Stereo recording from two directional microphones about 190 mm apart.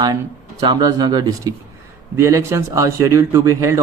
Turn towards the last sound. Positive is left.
turn(degrees=-15)  # may be behind; listen again after turning